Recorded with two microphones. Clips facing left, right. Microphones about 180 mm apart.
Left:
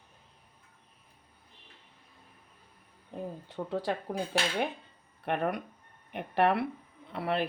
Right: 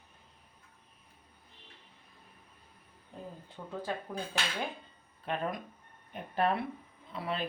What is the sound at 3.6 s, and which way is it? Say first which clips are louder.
Speech: left 6 dB; 75° left (ahead or behind).